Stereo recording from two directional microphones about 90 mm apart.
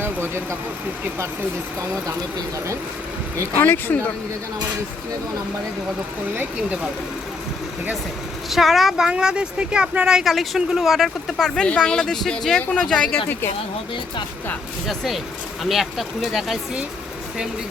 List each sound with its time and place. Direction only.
0.0 s vehicle: 25° right (ahead or behind)
3.6 s speech: 25° left (ahead or behind)
8.4 s a woman's voice: centre (ahead or behind)
14.8 s a woman's voice: centre (ahead or behind)